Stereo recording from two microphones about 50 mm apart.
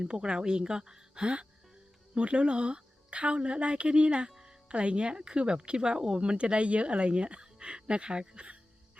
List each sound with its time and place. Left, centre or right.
0.0 s a woman's voice: centre
4.3 s music: centre
4.7 s speech: right